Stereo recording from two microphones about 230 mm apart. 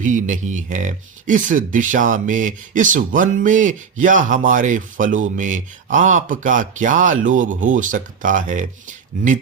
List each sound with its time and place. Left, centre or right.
0.0 s speech: right